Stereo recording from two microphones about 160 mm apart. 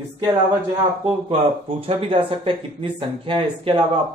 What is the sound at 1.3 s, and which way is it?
Speech, 35° right (ahead or behind).